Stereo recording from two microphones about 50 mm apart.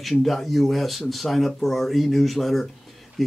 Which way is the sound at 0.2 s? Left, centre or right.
Centre.